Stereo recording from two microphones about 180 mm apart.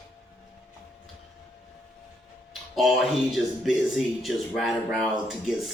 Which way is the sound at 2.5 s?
Centre (ahead or behind).